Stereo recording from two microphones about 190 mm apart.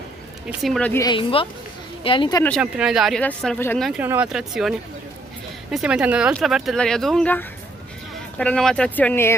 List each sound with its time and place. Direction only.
0.5 s speech: centre (ahead or behind)
0.9 s a woman's voice: 25° left (ahead or behind)
2.6 s speech: 5° right (ahead or behind)
3.9 s speech: 10° right (ahead or behind); by 9.3 s 10° left (ahead or behind)